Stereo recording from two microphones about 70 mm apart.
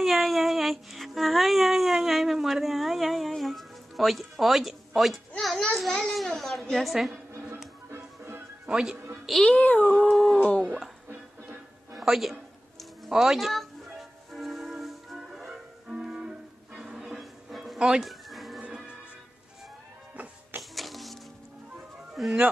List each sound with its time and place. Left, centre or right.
0.0 s music: centre
5.8 s a child's voice: centre
8.6 s speech: centre
9.4 s music: left
10.1 s a child's voice: centre
11.9 s a man's voice: centre
13.1 s music: centre
20.7 s music: centre
22.2 s a child's voice: centre